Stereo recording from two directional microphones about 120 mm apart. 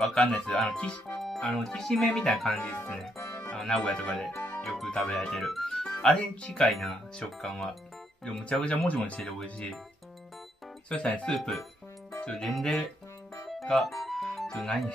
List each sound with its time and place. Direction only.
0.0 s speech: 5° left (ahead or behind)
3.2 s music: 20° left (ahead or behind)
3.5 s speech: 5° left (ahead or behind)
4.4 s music: 15° left (ahead or behind)
4.6 s speech: centre (ahead or behind)
10.9 s speech: 10° left (ahead or behind)
14.0 s music: centre (ahead or behind)